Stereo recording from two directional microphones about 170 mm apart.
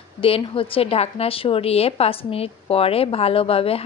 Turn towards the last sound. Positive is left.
turn(degrees=35)  # may be behind; listen again after turning